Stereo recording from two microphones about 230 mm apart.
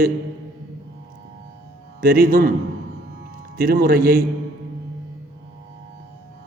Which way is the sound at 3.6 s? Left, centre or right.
Right.